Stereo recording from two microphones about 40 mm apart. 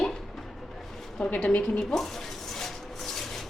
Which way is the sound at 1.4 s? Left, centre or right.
Left.